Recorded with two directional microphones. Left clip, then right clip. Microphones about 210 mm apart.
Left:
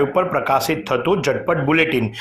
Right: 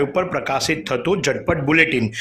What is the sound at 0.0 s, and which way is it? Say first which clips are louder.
Speech: left 3 dB; 20° right (ahead or behind).